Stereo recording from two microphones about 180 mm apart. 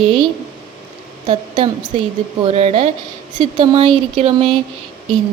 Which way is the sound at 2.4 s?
35° right (ahead or behind).